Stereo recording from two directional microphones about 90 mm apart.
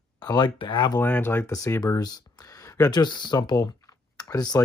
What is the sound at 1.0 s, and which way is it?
Speech, 20° left (ahead or behind).